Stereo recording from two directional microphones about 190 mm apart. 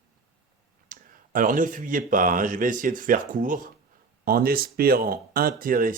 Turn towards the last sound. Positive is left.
turn(degrees=-45)  # may be behind; listen again after turning